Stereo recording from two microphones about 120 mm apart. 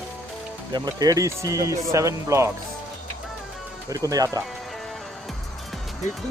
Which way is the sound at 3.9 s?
30° right (ahead or behind).